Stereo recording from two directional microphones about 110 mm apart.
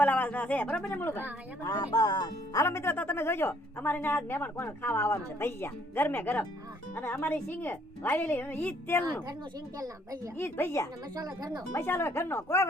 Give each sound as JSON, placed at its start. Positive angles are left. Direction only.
{"t": 0.0, "sound": "speech", "side_deg": 15}
{"t": 1.8, "sound": "a woman's voice", "side_deg": 45}
{"t": 9.7, "sound": "speech", "side_deg": -35}
{"t": 10.3, "sound": "speech", "side_deg": 20}
{"t": 11.1, "sound": "speech", "side_deg": -35}
{"t": 11.7, "sound": "speech", "side_deg": 20}